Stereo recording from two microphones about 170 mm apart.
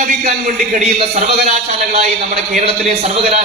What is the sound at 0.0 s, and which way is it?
A man's voice, 50° right (ahead or behind).